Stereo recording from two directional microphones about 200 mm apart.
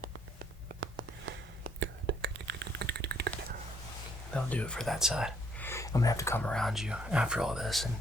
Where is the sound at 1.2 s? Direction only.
65° right (ahead or behind).